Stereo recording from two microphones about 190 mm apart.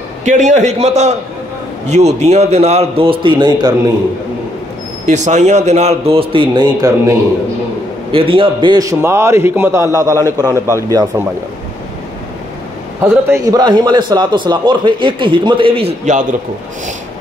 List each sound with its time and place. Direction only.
0.2 s a man's voice: 40° right (ahead or behind); by 3.7 s 20° right (ahead or behind)
5.0 s a man's voice: 40° right (ahead or behind); by 11.2 s 15° right (ahead or behind)
13.0 s a man's voice: 15° right (ahead or behind); by 16.3 s 35° right (ahead or behind)